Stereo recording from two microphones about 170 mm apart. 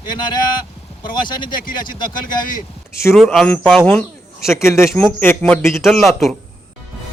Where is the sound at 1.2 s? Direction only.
25° left (ahead or behind).